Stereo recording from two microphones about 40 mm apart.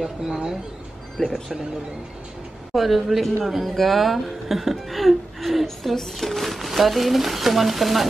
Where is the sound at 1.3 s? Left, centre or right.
Centre.